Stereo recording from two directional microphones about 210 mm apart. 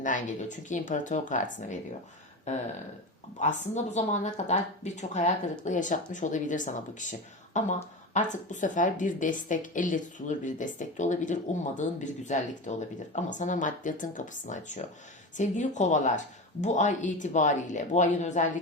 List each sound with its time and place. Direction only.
0.0 s a woman's voice: 35° left (ahead or behind)
3.3 s a woman's voice: 35° left (ahead or behind)